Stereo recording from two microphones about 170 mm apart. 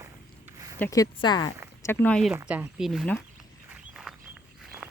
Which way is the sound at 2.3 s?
10° right (ahead or behind).